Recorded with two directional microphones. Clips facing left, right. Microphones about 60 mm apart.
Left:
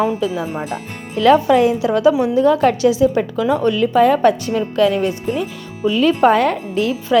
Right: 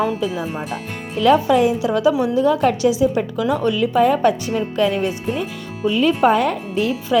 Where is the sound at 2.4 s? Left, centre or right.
Left.